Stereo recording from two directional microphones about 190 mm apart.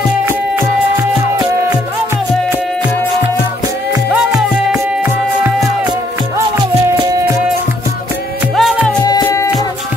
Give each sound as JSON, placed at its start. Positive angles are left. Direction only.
{"t": 4.1, "sound": "music", "side_deg": -5}
{"t": 8.5, "sound": "music", "side_deg": 0}
{"t": 9.0, "sound": "music", "side_deg": 20}